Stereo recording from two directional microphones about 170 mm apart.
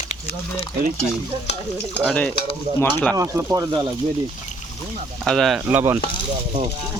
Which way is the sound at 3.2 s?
20° right (ahead or behind).